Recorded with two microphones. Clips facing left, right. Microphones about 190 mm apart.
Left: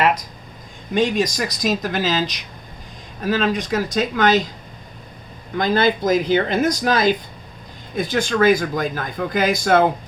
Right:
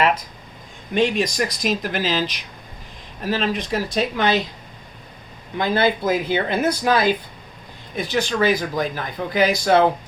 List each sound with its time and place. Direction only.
0.9 s speech: 40° left (ahead or behind)
3.5 s speech: 45° left (ahead or behind)
5.5 s speech: 40° left (ahead or behind)